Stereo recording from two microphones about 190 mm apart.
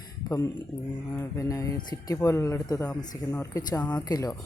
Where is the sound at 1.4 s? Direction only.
15° left (ahead or behind).